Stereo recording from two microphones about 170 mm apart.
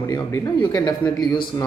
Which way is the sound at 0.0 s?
15° left (ahead or behind).